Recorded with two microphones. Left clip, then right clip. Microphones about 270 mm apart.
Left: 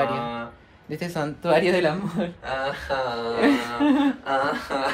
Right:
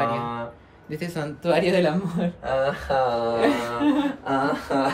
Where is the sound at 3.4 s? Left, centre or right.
Left.